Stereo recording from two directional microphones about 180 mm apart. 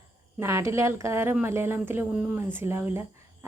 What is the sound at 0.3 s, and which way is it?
A woman's voice, 15° right (ahead or behind).